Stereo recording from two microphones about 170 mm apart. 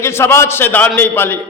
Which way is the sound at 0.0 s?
15° left (ahead or behind).